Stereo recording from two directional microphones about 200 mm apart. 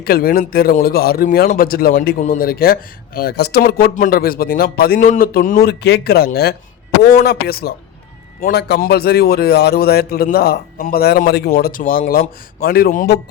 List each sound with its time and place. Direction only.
0.0 s a man's voice: 50° left (ahead or behind)
5.6 s a man's voice: 55° left (ahead or behind)